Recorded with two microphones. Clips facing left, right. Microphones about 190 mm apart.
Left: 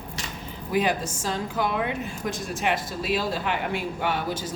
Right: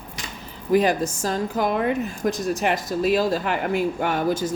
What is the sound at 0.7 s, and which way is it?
A woman's voice, 40° right (ahead or behind).